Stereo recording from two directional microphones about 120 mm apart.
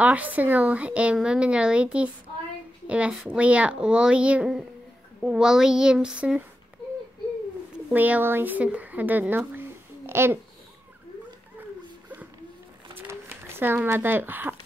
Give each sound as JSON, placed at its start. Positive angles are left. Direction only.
{"t": 0.0, "sound": "speech", "side_deg": -15}
{"t": 7.9, "sound": "speech", "side_deg": -15}
{"t": 13.0, "sound": "a sound", "side_deg": -20}